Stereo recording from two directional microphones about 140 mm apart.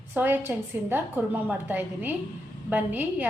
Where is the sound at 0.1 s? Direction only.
15° right (ahead or behind).